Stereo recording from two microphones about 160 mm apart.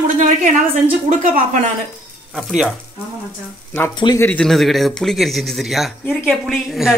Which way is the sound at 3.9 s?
30° left (ahead or behind).